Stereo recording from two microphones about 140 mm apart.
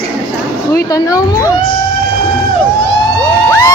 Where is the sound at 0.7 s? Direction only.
25° left (ahead or behind).